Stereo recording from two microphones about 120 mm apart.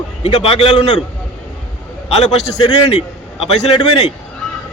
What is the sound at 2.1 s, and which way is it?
A man's voice, 55° left (ahead or behind).